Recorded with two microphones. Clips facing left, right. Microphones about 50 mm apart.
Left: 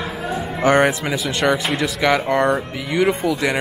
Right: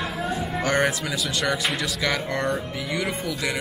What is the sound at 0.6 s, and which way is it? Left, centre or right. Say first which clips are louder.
Speech: left 8 dB; left.